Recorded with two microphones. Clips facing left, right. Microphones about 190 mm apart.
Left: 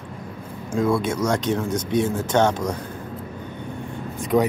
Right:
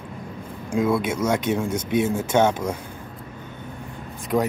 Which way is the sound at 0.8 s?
5° right (ahead or behind).